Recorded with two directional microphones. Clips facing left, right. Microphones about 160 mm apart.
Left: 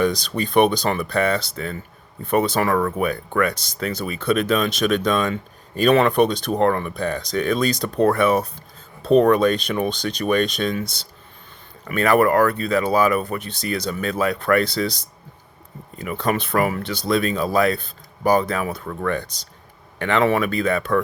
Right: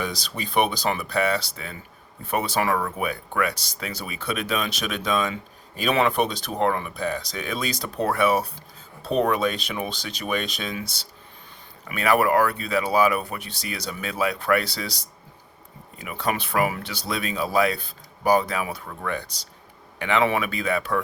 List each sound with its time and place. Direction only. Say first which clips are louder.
0.1 s speech: left 7 dB; 5° right (ahead or behind)
11.9 s speech: left 4 dB; 10° right (ahead or behind)
16.6 s speech: left 4 dB; 45° left (ahead or behind)
17.1 s speech: left 6 dB; 10° right (ahead or behind)